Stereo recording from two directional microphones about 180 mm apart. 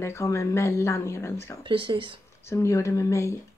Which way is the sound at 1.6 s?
30° right (ahead or behind).